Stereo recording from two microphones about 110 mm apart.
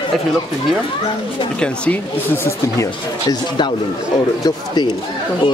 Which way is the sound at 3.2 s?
40° left (ahead or behind).